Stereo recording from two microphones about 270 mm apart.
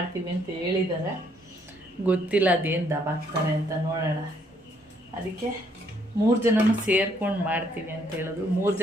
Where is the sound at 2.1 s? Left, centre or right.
Centre.